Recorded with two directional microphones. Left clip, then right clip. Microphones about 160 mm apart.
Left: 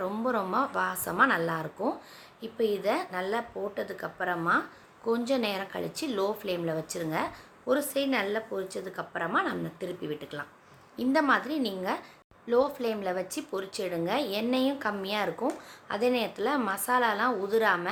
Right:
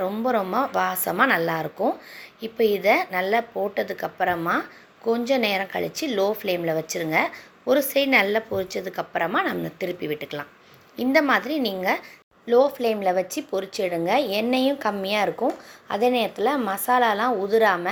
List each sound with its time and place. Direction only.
0.3 s a woman's voice: 15° right (ahead or behind)